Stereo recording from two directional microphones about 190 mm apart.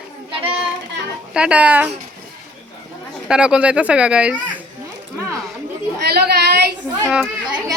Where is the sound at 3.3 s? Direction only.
5° right (ahead or behind).